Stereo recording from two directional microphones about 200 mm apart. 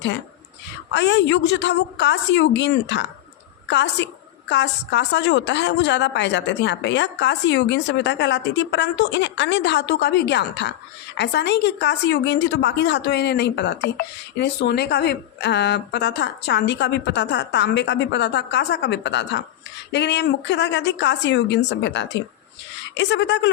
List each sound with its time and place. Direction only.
0.9 s a woman's voice: 60° left (ahead or behind)